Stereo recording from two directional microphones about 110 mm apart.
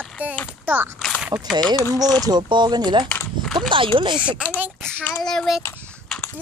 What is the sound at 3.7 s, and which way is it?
Speech, 50° right (ahead or behind).